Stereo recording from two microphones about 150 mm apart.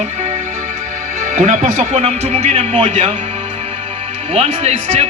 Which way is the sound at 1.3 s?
55° right (ahead or behind).